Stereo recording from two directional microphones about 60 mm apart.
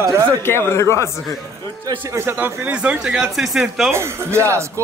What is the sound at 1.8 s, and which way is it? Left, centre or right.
Speech, right.